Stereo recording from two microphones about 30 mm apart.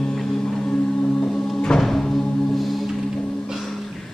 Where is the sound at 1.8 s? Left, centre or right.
Centre.